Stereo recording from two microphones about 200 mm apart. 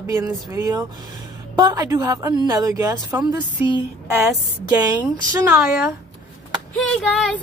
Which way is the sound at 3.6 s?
25° left (ahead or behind).